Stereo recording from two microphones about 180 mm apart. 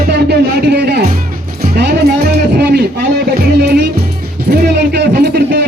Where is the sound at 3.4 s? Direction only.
65° right (ahead or behind).